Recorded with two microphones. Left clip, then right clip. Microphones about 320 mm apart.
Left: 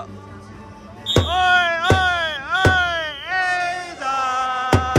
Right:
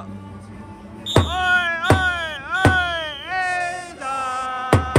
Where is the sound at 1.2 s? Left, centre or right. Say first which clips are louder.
Left 4 dB; centre.